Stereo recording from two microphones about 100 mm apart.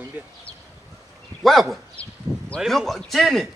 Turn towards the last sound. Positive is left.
turn(degrees=0)  # may be behind; listen again after turning